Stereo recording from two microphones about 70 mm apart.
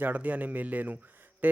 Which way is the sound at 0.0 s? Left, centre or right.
Right.